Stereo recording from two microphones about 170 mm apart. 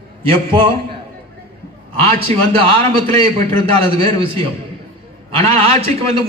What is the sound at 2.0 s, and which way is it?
A man's voice, 35° right (ahead or behind).